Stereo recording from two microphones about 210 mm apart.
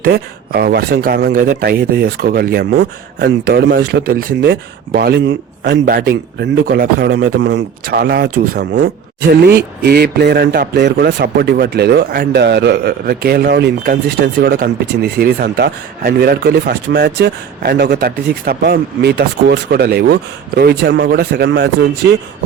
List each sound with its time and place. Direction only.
0.0 s speech: 50° right (ahead or behind)